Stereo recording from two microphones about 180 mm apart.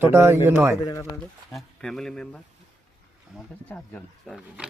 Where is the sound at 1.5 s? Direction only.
5° left (ahead or behind).